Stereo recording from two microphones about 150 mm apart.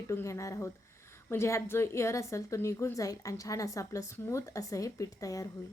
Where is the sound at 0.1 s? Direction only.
20° left (ahead or behind).